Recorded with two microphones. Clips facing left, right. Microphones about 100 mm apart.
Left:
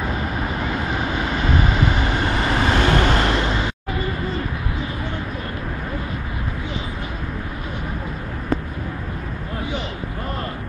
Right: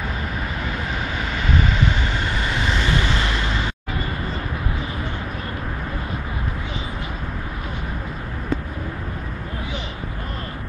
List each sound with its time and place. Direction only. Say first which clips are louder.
1.8 s vehicle: left 3 dB; 40° left (ahead or behind)